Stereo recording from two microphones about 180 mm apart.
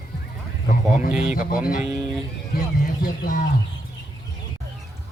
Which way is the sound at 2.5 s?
50° left (ahead or behind).